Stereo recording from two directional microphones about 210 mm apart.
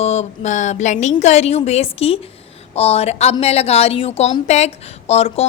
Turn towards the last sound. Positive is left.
turn(degrees=30)  # may be behind; listen again after turning